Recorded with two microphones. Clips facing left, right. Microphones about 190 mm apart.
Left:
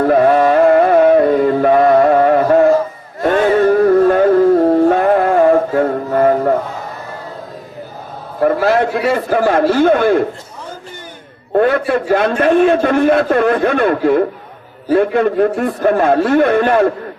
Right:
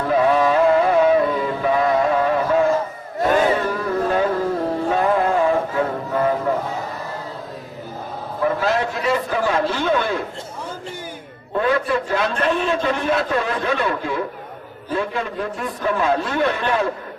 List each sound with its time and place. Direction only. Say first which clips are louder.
0.0 s music: left 6 dB; 55° left (ahead or behind)
8.4 s a man's voice: left 7 dB; 55° left (ahead or behind)
11.5 s a man's voice: left 7 dB; 55° left (ahead or behind)